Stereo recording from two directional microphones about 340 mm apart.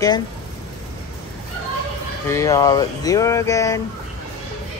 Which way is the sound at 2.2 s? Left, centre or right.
Centre.